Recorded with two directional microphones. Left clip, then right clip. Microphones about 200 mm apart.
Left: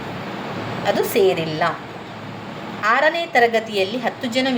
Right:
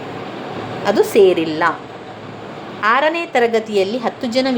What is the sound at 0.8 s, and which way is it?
Speech, 25° right (ahead or behind).